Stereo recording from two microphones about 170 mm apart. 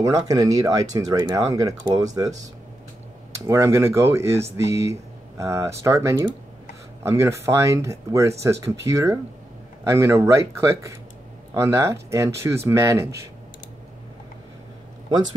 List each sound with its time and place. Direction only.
0.0 s speech: 20° right (ahead or behind)
3.3 s speech: 15° right (ahead or behind)